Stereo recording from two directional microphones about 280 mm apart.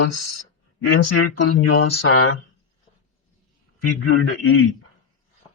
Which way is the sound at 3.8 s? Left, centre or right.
Left.